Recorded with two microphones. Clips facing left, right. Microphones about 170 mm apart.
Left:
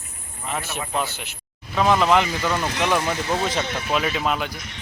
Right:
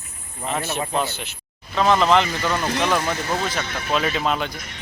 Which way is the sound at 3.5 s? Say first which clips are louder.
Left 2 dB; 20° left (ahead or behind).